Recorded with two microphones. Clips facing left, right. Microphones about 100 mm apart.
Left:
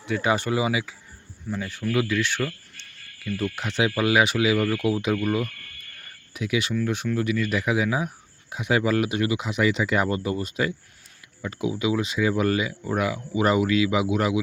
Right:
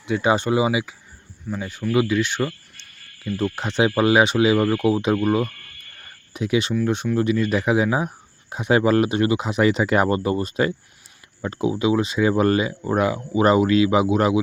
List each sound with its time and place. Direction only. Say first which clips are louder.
0.0 s speech: right 4 dB; 25° right (ahead or behind)